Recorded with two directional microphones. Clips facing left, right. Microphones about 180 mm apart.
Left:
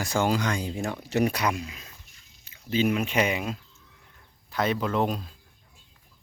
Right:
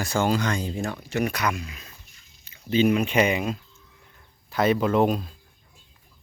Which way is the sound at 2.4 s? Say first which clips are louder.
Right 4 dB; 5° left (ahead or behind).